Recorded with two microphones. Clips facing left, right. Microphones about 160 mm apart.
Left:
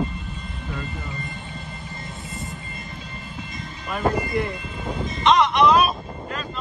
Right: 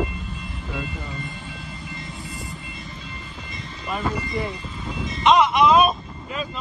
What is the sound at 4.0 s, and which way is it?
Speech, 50° left (ahead or behind).